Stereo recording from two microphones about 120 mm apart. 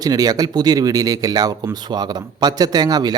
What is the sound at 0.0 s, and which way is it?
Speech, 30° right (ahead or behind).